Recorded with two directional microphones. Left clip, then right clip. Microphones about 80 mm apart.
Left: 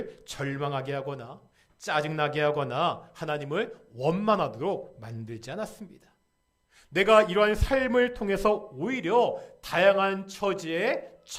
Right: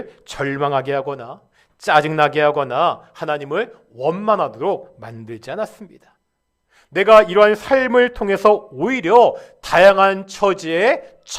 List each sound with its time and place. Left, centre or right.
0.0 s a man's voice: left
0.3 s a man's voice: centre
1.0 s speech: centre
1.8 s a man's voice: centre
2.4 s speech: centre; by 7.2 s left
7.2 s a man's voice: centre